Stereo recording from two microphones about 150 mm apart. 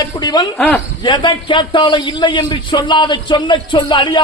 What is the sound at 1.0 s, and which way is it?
A man's voice, 30° left (ahead or behind).